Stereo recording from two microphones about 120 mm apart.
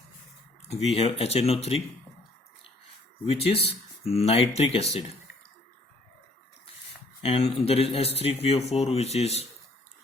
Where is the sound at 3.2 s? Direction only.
50° left (ahead or behind).